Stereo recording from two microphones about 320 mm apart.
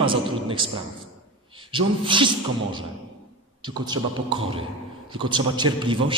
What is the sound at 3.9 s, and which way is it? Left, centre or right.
A man's voice, centre.